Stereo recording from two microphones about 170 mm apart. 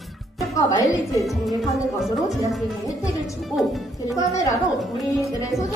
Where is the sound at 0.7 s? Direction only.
20° left (ahead or behind).